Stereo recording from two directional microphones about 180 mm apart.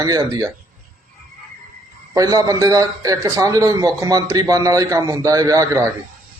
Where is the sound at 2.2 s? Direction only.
20° right (ahead or behind).